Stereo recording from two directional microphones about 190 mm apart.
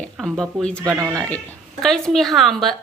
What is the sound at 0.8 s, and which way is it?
Sizzle, 15° right (ahead or behind).